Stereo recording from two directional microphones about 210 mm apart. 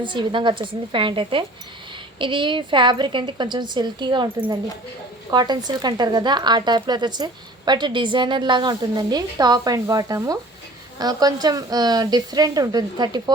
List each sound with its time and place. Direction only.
0.0 s a woman's voice: 20° right (ahead or behind)